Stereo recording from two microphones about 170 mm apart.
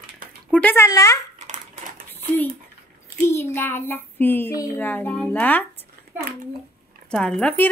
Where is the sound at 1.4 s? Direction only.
50° right (ahead or behind).